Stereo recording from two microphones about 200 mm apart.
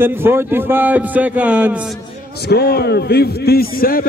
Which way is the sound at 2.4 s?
55° left (ahead or behind).